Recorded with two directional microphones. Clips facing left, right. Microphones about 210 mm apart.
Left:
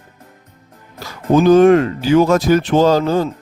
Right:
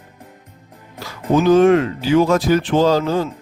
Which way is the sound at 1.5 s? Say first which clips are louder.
Left 3 dB; 45° left (ahead or behind).